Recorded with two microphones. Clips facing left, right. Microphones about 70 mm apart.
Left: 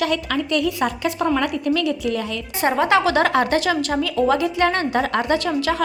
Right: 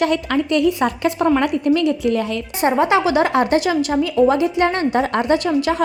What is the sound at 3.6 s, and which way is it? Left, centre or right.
A woman's voice, centre.